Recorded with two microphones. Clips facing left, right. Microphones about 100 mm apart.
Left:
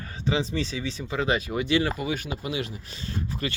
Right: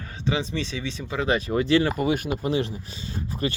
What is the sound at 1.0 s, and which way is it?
Speech, 20° left (ahead or behind).